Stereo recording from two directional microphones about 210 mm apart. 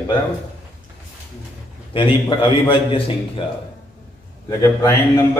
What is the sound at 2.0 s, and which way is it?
A man's voice, 25° left (ahead or behind).